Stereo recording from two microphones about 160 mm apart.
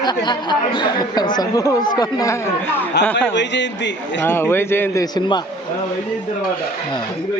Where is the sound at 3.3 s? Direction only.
90° left.